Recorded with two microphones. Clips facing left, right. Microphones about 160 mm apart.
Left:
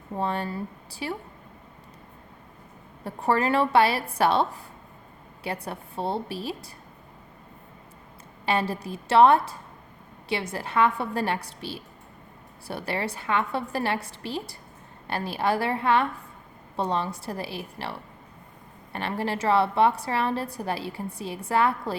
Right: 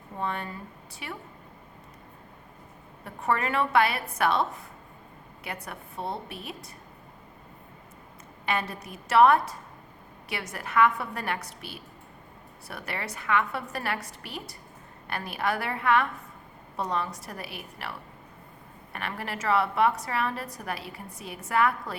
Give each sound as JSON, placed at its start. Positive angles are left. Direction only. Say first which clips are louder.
{"t": 0.2, "sound": "a woman's voice", "louder": "left 4 dB", "side_deg": 30}
{"t": 3.0, "sound": "a woman's voice", "louder": "left 4 dB", "side_deg": 30}
{"t": 8.4, "sound": "a woman's voice", "louder": "left 5 dB", "side_deg": 30}